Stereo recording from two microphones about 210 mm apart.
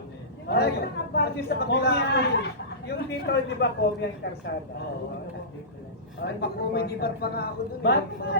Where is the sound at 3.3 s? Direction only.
50° left (ahead or behind).